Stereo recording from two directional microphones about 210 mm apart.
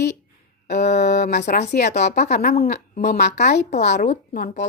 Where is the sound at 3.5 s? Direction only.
55° left (ahead or behind).